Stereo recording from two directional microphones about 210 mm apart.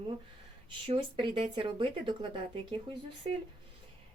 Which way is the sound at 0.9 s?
25° right (ahead or behind).